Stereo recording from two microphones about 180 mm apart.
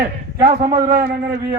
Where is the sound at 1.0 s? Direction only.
55° right (ahead or behind).